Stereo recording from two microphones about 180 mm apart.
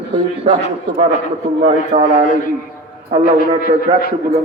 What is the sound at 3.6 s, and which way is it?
Speech, 55° left (ahead or behind).